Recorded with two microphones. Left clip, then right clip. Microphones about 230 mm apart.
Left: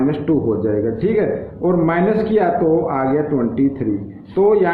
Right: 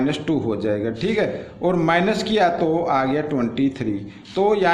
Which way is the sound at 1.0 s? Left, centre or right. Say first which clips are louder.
Left 3 dB; right.